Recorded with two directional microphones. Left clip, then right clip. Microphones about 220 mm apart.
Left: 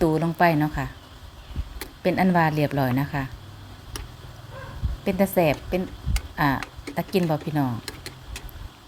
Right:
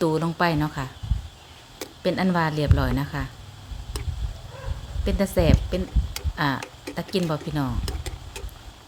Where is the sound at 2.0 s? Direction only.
Centre (ahead or behind).